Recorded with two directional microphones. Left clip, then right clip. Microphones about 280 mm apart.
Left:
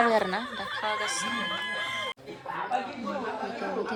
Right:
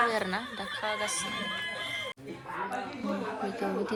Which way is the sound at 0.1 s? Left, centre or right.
Centre.